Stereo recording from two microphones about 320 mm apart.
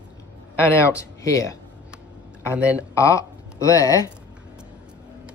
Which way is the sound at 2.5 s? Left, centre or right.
Centre.